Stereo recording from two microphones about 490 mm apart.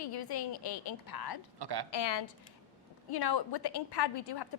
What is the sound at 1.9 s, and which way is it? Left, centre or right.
A woman's voice, left.